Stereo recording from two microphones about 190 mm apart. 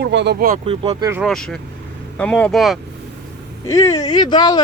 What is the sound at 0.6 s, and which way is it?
Speech, 30° right (ahead or behind).